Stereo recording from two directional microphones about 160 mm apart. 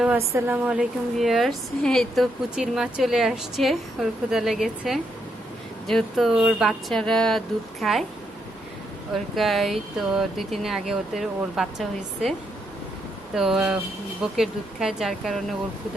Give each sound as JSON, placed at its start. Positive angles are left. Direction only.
{"t": 0.2, "sound": "a woman's voice", "side_deg": -15}
{"t": 9.1, "sound": "a woman's voice", "side_deg": 0}
{"t": 13.3, "sound": "a woman's voice", "side_deg": 0}